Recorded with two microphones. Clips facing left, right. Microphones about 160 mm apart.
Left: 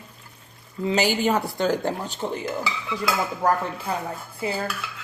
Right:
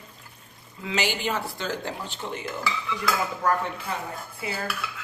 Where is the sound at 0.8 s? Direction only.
40° left (ahead or behind).